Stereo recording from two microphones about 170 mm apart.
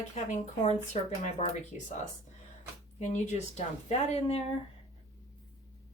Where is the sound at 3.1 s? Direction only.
40° left (ahead or behind).